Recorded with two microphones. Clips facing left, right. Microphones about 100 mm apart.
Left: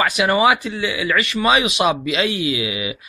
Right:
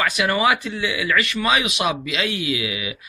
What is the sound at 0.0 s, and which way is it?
Speech, 15° left (ahead or behind).